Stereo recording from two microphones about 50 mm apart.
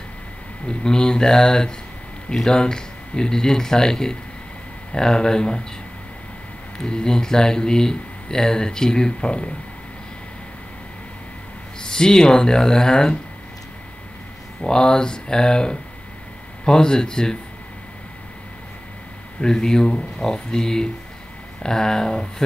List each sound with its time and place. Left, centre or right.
0.7 s speech: centre
6.8 s speech: centre
11.8 s speech: centre
14.6 s speech: centre
19.4 s speech: centre